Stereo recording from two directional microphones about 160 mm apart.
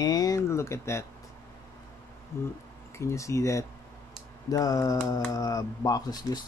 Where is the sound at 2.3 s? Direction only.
15° left (ahead or behind).